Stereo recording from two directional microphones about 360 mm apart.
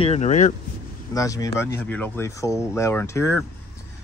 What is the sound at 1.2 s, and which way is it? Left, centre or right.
Speech, centre.